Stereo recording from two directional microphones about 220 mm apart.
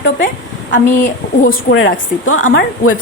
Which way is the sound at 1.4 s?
55° left (ahead or behind).